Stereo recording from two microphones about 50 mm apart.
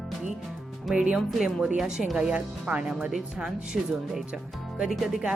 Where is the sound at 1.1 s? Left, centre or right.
Centre.